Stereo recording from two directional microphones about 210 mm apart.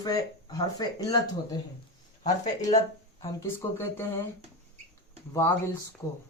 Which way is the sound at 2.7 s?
15° left (ahead or behind).